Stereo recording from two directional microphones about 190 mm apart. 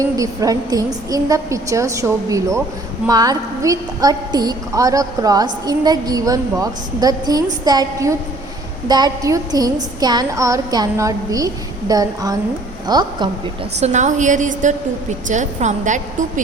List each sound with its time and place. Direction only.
0.0 s a woman's voice: 20° right (ahead or behind)
13.7 s a woman's voice: 35° right (ahead or behind)